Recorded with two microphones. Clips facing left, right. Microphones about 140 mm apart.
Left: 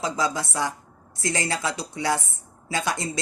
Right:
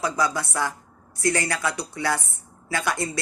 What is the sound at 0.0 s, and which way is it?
Speech, 20° left (ahead or behind).